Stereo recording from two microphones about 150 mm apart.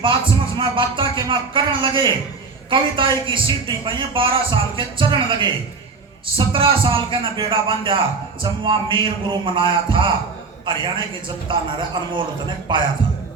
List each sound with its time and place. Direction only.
0.0 s a man's voice: 35° right (ahead or behind)